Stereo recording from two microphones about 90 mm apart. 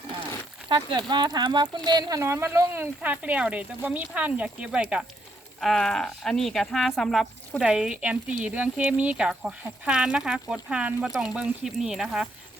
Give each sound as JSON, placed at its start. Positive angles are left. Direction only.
{"t": 0.9, "sound": "speech", "side_deg": -55}
{"t": 2.2, "sound": "speech", "side_deg": -30}
{"t": 5.5, "sound": "speech", "side_deg": 5}
{"t": 7.6, "sound": "speech", "side_deg": -10}